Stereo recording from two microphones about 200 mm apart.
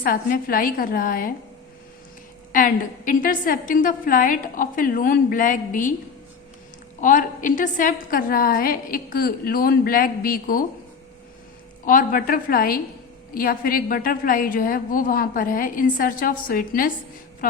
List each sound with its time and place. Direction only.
0.0 s a woman's voice: 45° left (ahead or behind)
2.5 s a woman's voice: 45° left (ahead or behind)
7.0 s a woman's voice: 40° left (ahead or behind)
11.9 s a woman's voice: 45° left (ahead or behind)